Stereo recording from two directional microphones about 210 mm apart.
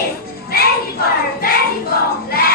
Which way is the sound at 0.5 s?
45° left (ahead or behind).